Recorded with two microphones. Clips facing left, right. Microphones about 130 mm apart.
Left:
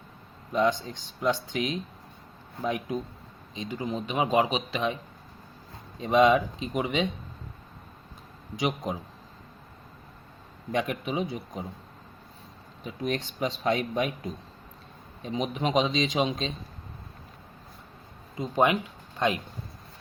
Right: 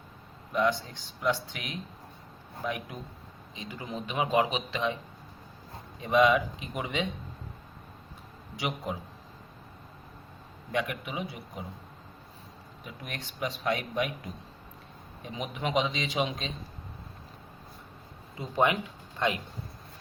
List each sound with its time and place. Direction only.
0.5 s a man's voice: 20° left (ahead or behind)
6.0 s a man's voice: 25° left (ahead or behind)
8.6 s a man's voice: 15° left (ahead or behind)
10.7 s a man's voice: 25° left (ahead or behind)
12.8 s a man's voice: 25° left (ahead or behind)
15.2 s a man's voice: 25° left (ahead or behind)
18.3 s a man's voice: 20° left (ahead or behind)